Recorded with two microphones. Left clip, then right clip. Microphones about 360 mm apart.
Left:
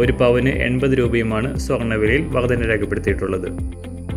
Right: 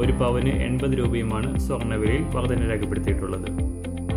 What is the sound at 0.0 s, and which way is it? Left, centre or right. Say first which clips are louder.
Speech: left 8 dB; centre.